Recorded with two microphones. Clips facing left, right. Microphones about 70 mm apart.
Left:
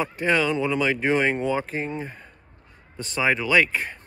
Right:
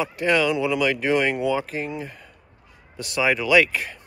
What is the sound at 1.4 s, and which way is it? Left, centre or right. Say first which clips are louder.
Speech: right 2 dB; left.